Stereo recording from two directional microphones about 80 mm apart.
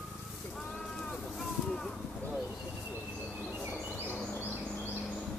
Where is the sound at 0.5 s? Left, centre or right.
Centre.